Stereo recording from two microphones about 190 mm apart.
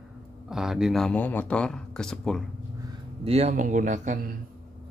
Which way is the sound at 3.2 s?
35° right (ahead or behind).